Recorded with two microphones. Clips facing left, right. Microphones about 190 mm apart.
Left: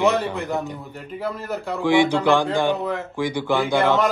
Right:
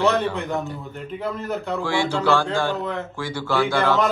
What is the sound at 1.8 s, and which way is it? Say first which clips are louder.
A man's voice: left 8 dB; 15° left (ahead or behind).